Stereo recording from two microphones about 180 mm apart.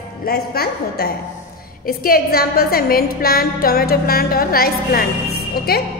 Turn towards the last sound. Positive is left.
turn(degrees=60)  # may be behind; listen again after turning